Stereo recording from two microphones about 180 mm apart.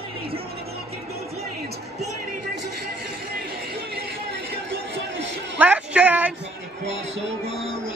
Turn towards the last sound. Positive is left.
turn(degrees=-10)  # may be behind; listen again after turning